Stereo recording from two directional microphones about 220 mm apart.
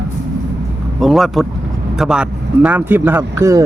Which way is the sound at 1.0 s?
Centre (ahead or behind).